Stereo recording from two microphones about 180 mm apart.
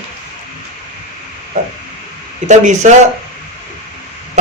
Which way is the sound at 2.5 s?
40° right (ahead or behind).